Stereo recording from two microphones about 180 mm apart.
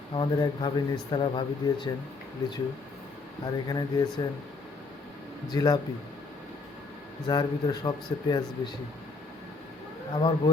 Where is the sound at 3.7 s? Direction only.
20° left (ahead or behind).